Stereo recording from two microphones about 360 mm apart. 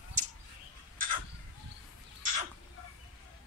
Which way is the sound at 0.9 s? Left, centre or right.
Right.